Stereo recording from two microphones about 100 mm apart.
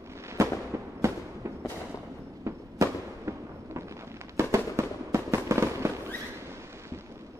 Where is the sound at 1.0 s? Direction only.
30° right (ahead or behind).